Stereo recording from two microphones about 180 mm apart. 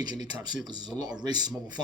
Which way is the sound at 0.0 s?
25° right (ahead or behind).